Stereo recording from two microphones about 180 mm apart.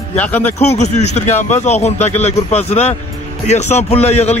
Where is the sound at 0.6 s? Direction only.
35° left (ahead or behind).